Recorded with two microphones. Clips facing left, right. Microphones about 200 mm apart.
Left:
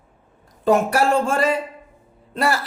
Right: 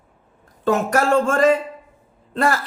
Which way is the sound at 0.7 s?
10° left (ahead or behind).